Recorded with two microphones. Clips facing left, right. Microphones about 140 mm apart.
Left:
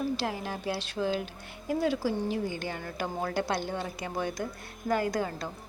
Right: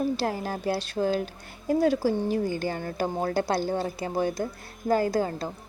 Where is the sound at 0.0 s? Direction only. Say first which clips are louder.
Right 4 dB; 40° right (ahead or behind).